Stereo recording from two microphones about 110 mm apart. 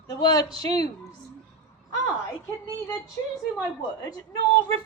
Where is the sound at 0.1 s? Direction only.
35° left (ahead or behind).